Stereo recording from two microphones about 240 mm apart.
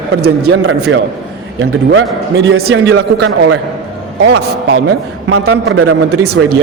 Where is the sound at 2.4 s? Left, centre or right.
Right.